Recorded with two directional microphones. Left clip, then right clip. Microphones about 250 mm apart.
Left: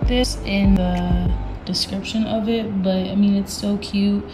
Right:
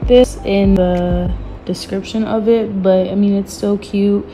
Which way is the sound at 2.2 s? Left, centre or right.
Right.